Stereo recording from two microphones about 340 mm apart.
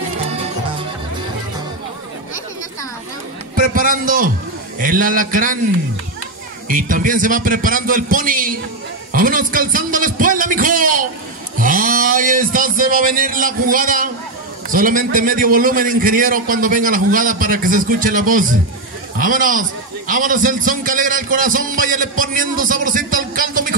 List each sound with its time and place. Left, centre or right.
3.5 s a man's voice: right
6.7 s a man's voice: right